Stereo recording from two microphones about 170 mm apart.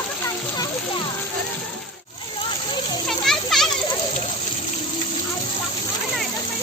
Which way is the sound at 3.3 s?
Centre (ahead or behind).